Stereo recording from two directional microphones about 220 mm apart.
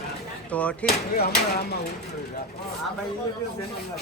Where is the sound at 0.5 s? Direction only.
5° left (ahead or behind).